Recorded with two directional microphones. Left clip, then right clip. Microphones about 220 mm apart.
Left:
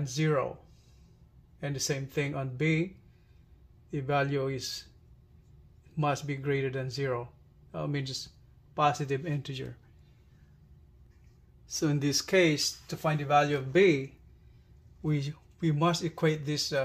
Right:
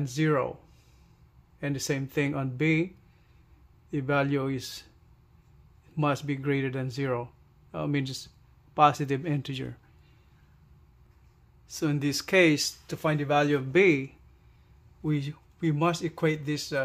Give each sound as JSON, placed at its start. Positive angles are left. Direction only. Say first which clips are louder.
{"t": 0.1, "sound": "speech", "louder": "right 3 dB", "side_deg": -35}
{"t": 1.6, "sound": "speech", "louder": "right 3 dB", "side_deg": -35}
{"t": 3.9, "sound": "speech", "louder": "right 2 dB", "side_deg": -30}
{"t": 5.9, "sound": "speech", "louder": "right 2 dB", "side_deg": -30}
{"t": 11.7, "sound": "speech", "louder": "even", "side_deg": -5}
{"t": 12.5, "sound": "speech", "louder": "right 1 dB", "side_deg": -40}
{"t": 13.7, "sound": "speech", "louder": "right 2 dB", "side_deg": -20}